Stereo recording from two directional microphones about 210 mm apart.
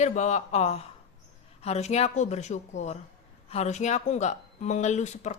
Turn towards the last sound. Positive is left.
turn(degrees=35)  # may be behind; listen again after turning